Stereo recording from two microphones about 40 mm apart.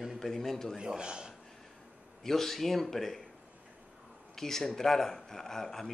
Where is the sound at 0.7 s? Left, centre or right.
Right.